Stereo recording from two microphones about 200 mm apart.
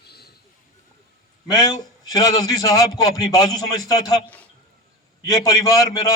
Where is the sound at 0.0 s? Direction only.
55° left (ahead or behind).